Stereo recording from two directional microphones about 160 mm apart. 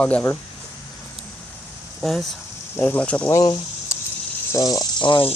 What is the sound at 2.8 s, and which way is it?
Speech, 10° left (ahead or behind).